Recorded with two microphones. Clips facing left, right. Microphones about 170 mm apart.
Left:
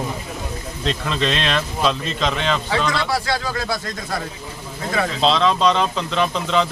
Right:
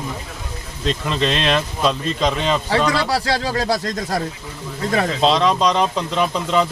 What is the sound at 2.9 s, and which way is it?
Speech, 35° right (ahead or behind).